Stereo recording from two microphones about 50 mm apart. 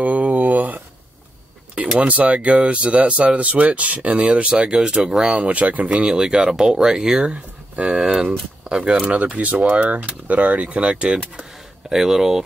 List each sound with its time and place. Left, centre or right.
0.0 s a sound: right
1.8 s speech: right
11.9 s speech: centre